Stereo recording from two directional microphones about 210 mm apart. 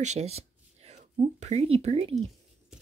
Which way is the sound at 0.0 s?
30° right (ahead or behind).